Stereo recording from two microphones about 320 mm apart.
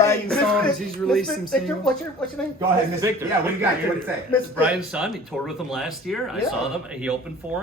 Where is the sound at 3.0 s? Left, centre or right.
Centre.